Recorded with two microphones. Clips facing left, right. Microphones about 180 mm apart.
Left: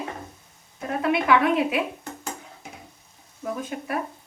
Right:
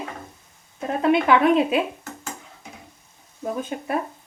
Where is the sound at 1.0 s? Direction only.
25° right (ahead or behind).